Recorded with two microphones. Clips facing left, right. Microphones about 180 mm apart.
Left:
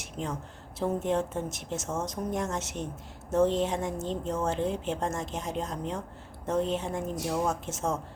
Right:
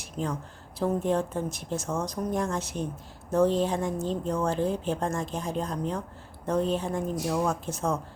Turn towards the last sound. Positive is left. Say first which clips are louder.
# right 2 dB
turn(degrees=25)  # may be behind; listen again after turning